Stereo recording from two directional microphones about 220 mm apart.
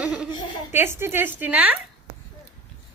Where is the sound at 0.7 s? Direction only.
10° right (ahead or behind).